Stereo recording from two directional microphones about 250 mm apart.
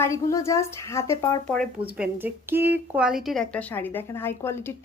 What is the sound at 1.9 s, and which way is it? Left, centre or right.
A woman's voice, centre.